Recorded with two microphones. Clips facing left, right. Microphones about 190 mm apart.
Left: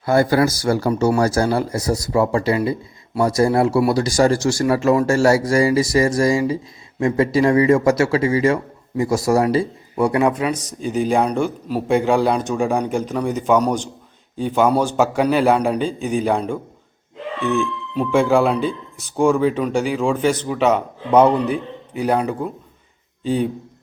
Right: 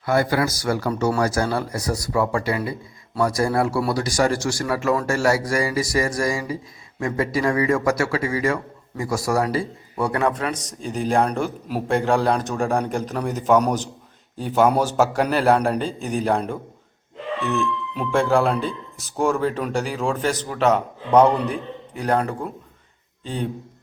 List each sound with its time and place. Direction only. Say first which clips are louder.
0.0 s a man's voice: left 5 dB; 30° left (ahead or behind); by 23.5 s 5° left (ahead or behind)